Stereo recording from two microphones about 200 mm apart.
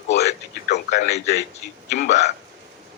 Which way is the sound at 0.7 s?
55° left (ahead or behind).